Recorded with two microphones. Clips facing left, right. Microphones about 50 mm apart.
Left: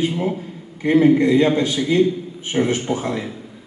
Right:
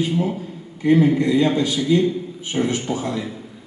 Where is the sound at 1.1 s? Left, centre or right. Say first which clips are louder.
Left 2 dB; left.